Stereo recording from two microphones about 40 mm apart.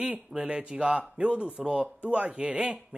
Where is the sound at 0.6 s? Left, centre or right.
Right.